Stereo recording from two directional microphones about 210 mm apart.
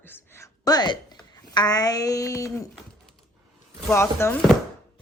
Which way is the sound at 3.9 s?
10° left (ahead or behind).